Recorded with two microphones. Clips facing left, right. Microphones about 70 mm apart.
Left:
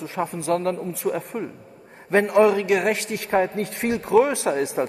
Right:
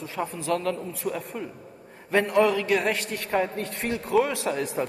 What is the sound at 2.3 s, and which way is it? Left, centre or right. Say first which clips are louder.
A man's voice: left 5 dB; left.